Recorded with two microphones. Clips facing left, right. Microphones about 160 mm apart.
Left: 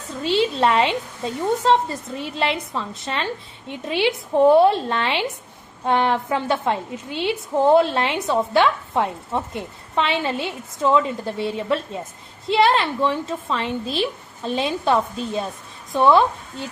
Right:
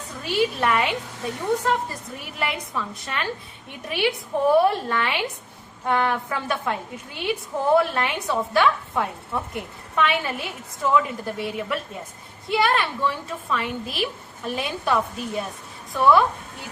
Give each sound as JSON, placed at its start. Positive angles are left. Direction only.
{"t": 0.2, "sound": "a woman's voice", "side_deg": 25}